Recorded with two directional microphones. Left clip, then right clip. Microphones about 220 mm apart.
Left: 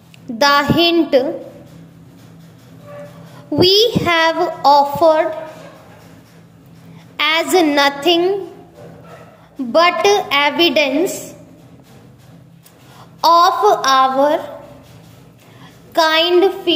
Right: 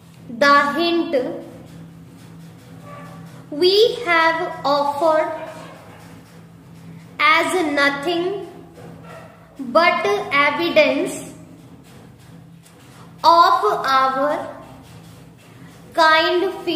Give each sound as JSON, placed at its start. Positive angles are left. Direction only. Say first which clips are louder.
{"t": 0.4, "sound": "a child's voice", "louder": "left 2 dB", "side_deg": 40}
{"t": 3.5, "sound": "a child's voice", "louder": "left 3 dB", "side_deg": 40}
{"t": 7.2, "sound": "a child's voice", "louder": "left 2 dB", "side_deg": 40}
{"t": 9.7, "sound": "a child's voice", "louder": "left 4 dB", "side_deg": 40}
{"t": 13.2, "sound": "a child's voice", "louder": "left 2 dB", "side_deg": 35}
{"t": 15.9, "sound": "a child's voice", "louder": "left 2 dB", "side_deg": 40}